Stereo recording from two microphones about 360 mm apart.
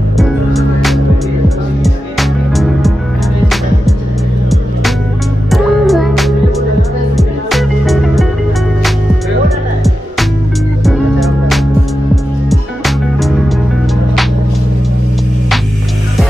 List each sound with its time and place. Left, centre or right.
0.2 s music: centre
5.5 s music: centre
10.8 s music: centre